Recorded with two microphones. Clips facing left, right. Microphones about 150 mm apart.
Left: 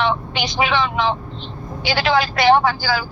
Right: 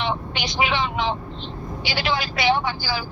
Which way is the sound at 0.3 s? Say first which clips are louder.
Left 2 dB; 90° left.